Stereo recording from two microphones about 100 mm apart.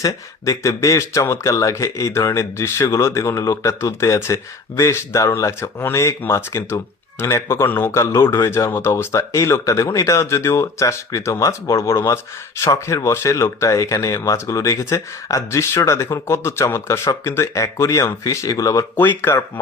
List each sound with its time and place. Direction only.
0.0 s speech: 35° left (ahead or behind)
18.9 s speech: 20° left (ahead or behind)